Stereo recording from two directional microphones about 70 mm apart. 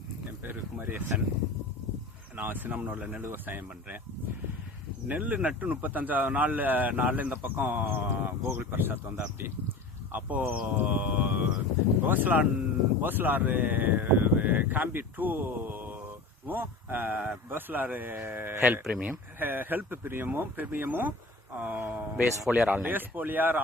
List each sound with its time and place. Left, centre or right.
0.4 s a sound: right
2.3 s speech: right
5.0 s speech: right
18.6 s speech: centre